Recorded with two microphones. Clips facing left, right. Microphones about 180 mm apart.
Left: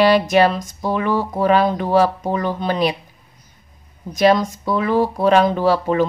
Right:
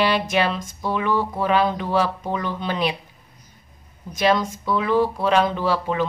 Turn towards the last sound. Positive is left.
turn(degrees=40)  # may be behind; listen again after turning